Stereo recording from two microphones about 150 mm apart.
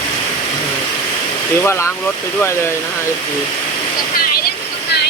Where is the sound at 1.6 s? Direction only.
15° left (ahead or behind).